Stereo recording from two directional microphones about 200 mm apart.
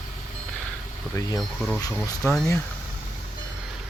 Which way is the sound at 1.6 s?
5° left (ahead or behind).